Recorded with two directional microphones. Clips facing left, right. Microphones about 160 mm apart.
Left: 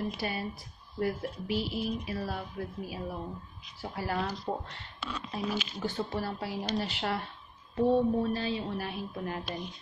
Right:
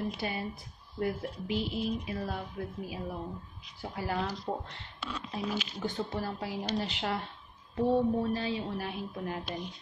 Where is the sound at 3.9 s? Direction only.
15° right (ahead or behind).